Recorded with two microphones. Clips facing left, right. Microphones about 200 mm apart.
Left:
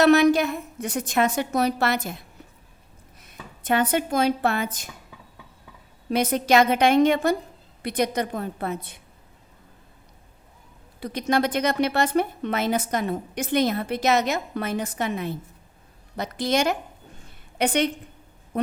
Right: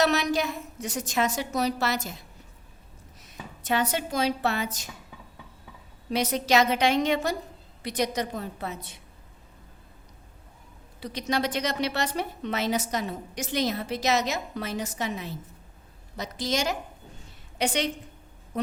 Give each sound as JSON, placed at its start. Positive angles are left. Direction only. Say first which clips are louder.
{"t": 0.0, "sound": "a woman's voice", "louder": "left 8 dB", "side_deg": 55}
{"t": 6.1, "sound": "a woman's voice", "louder": "left 4 dB", "side_deg": 55}
{"t": 11.0, "sound": "a woman's voice", "louder": "left 5 dB", "side_deg": 55}
{"t": 17.2, "sound": "a sound", "louder": "left 4 dB", "side_deg": 55}